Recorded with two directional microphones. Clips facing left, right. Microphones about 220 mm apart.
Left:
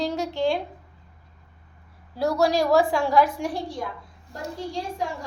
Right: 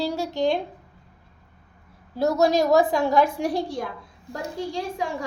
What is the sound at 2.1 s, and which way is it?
A woman's voice, 25° right (ahead or behind).